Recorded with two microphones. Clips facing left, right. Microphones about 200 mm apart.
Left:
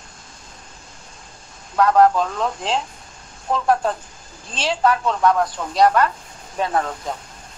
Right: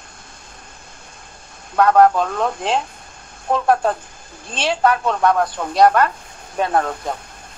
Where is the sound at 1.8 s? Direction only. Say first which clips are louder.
Right 2 dB; 55° right (ahead or behind).